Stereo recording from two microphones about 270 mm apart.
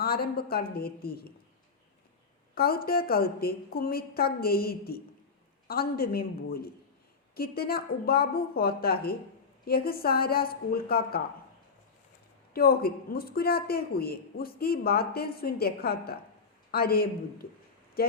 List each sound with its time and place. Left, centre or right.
0.0 s a woman's voice: left
2.6 s a man's voice: left
12.5 s a man's voice: left
18.0 s a sound: left